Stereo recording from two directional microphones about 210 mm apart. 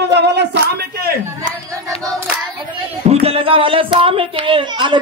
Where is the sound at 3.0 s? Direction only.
30° right (ahead or behind).